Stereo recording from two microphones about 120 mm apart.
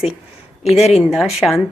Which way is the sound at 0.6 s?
60° left (ahead or behind).